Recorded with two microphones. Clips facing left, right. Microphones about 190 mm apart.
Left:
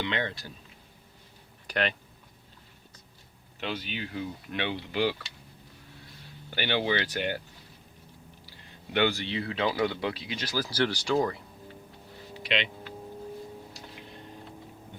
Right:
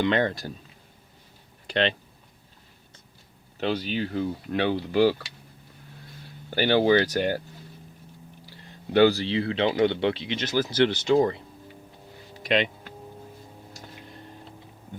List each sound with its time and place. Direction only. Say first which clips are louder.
0.0 s speech: right 8 dB; 45° right (ahead or behind)
1.6 s speech: right 5 dB; 25° right (ahead or behind)
3.6 s speech: right 8 dB; 40° right (ahead or behind)
6.5 s speech: right 8 dB; 40° right (ahead or behind)
8.9 s speech: right 8 dB; 35° right (ahead or behind)
12.4 s vehicle: right 7 dB; 45° right (ahead or behind)
13.7 s a sound: right 1 dB; 45° right (ahead or behind)